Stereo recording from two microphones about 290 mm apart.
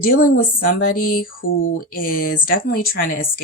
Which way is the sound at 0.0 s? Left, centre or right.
Left.